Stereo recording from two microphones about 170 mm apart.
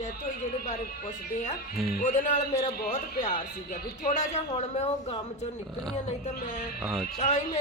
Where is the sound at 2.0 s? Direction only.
45° left (ahead or behind).